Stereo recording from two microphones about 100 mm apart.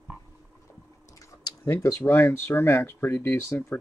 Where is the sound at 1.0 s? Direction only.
35° left (ahead or behind).